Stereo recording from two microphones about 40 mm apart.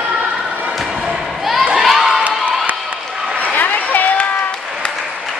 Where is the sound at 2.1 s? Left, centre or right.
Right.